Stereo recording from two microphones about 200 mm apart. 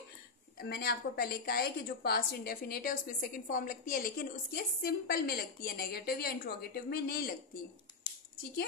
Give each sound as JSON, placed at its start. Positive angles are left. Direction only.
{"t": 0.6, "sound": "a woman's voice", "side_deg": 50}